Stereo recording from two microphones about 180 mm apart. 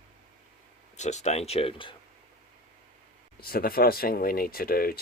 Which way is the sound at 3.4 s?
55° left (ahead or behind).